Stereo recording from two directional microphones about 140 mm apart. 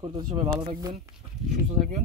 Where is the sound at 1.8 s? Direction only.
65° right (ahead or behind).